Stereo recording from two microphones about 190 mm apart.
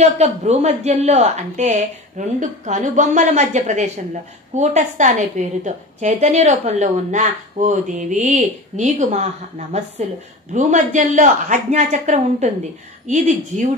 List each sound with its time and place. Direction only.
0.0 s speech: 35° right (ahead or behind)